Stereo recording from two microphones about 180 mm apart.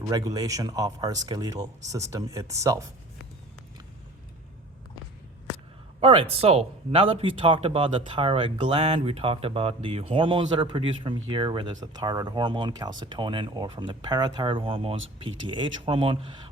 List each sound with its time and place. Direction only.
0.1 s speech: 20° right (ahead or behind)
6.0 s speech: 30° right (ahead or behind)